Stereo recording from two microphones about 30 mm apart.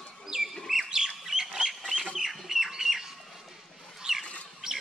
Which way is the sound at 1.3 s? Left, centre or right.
Centre.